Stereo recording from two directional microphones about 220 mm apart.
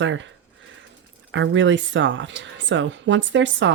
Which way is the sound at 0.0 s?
60° right (ahead or behind).